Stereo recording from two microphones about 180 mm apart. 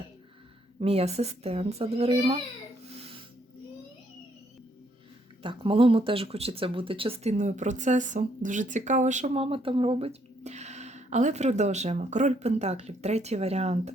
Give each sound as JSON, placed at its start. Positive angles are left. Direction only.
{"t": 0.8, "sound": "speech", "side_deg": -35}
{"t": 5.4, "sound": "speech", "side_deg": -30}